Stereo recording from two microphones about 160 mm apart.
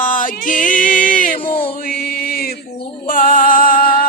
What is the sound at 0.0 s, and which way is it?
Music, 55° left (ahead or behind).